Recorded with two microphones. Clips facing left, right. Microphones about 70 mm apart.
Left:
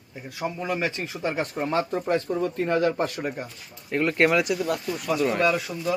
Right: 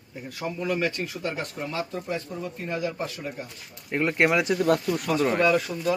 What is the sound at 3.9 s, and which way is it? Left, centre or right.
Speech, centre.